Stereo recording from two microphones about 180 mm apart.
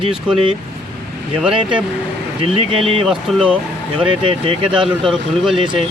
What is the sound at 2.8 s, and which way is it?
Speech, centre (ahead or behind).